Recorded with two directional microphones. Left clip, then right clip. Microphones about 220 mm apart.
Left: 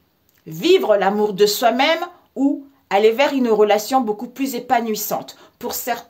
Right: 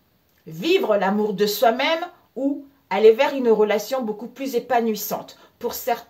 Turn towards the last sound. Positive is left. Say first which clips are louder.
# even
turn(degrees=55)  # may be behind; listen again after turning